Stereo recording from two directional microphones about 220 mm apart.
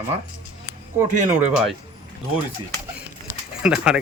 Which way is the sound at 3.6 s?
5° right (ahead or behind).